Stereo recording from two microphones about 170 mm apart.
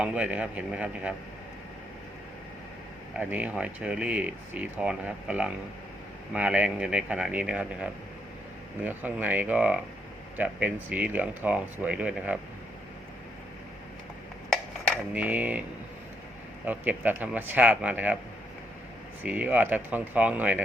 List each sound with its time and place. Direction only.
0.0 s speech: 10° right (ahead or behind)
3.2 s speech: 10° right (ahead or behind)
14.5 s a sound: 5° right (ahead or behind)
16.6 s speech: 10° right (ahead or behind)
19.2 s speech: 10° right (ahead or behind)